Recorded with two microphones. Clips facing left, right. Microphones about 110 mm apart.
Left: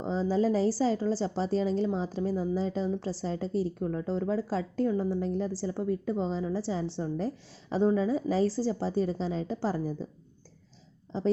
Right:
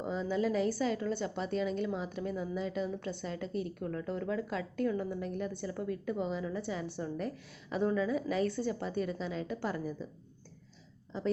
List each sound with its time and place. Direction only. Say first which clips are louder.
0.0 s a woman's voice: left 5 dB; 30° left (ahead or behind)